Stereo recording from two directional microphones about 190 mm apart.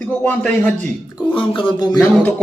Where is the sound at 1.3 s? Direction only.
25° left (ahead or behind).